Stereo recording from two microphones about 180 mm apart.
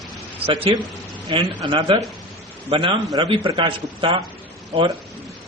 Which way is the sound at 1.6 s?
30° right (ahead or behind).